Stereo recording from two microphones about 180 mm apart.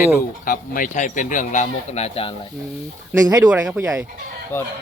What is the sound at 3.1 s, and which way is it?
Speech, 20° right (ahead or behind).